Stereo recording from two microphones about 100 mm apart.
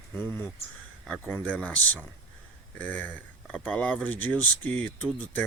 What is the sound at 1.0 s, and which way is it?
Speech, 10° left (ahead or behind).